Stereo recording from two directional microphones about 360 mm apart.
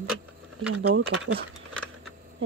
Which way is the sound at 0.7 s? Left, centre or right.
Right.